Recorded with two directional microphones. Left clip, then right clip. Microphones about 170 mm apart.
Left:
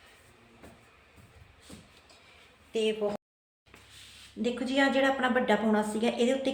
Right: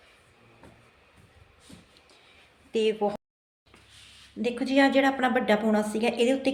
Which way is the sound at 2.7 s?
90° right.